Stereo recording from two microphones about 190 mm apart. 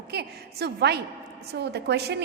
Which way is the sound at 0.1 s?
60° right (ahead or behind).